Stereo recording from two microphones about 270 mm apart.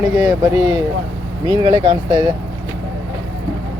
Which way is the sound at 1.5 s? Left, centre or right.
Centre.